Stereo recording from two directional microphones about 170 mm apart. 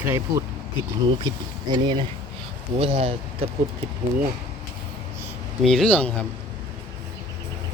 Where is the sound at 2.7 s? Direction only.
35° right (ahead or behind).